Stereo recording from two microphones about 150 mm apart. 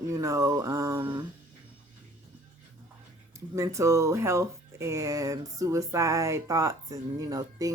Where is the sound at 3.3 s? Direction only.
20° right (ahead or behind).